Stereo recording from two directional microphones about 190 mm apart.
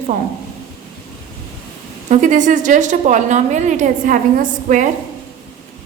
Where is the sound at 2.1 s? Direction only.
40° right (ahead or behind).